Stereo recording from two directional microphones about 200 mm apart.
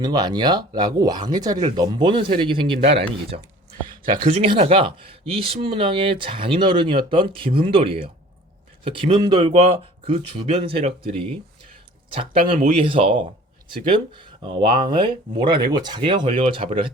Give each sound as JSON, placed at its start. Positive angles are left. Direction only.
{"t": 0.0, "sound": "speech", "side_deg": -20}
{"t": 12.5, "sound": "speech", "side_deg": -30}